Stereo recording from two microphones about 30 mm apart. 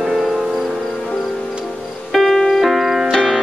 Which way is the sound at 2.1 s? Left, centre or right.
Centre.